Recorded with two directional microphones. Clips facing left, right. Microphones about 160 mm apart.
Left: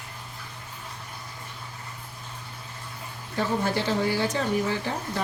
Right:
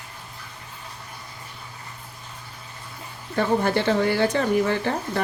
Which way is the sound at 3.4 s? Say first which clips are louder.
Right 5 dB; 60° right (ahead or behind).